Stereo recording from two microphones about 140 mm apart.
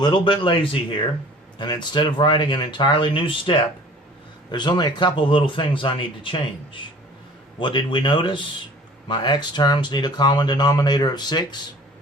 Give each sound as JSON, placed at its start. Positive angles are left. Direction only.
{"t": 0.0, "sound": "speech", "side_deg": 35}